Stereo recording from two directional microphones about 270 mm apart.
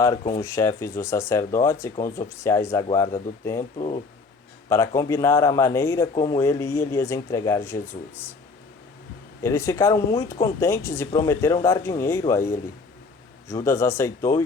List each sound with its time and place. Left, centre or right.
0.0 s speech: centre
3.6 s speech: left
4.7 s speech: centre
9.4 s speech: centre